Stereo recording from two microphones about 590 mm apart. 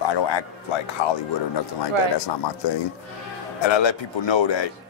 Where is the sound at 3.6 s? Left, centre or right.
Left.